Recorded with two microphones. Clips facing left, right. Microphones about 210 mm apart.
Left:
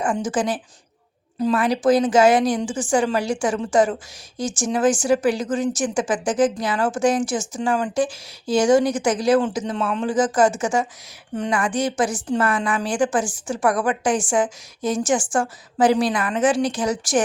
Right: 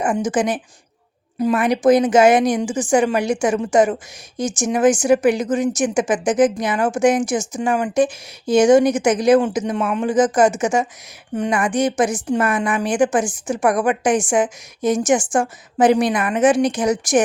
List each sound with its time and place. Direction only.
0.3 s a woman's voice: 15° right (ahead or behind)